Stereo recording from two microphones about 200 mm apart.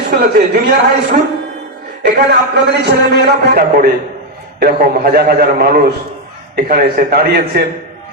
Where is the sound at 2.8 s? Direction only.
50° right (ahead or behind).